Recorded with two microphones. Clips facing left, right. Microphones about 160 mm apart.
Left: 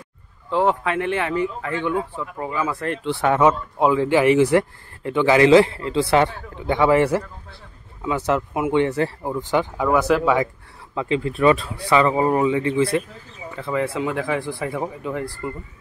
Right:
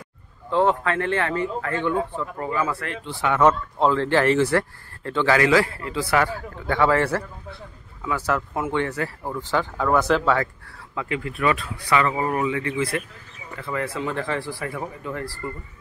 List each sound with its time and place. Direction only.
0.5 s speech: 15° left (ahead or behind)
11.0 s speech: 25° left (ahead or behind)